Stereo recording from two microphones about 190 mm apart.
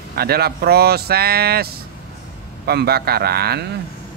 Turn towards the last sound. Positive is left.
turn(degrees=-55)  # may be behind; listen again after turning